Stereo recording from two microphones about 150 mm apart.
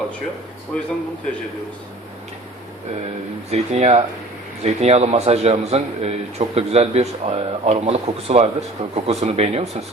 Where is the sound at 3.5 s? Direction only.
45° right (ahead or behind).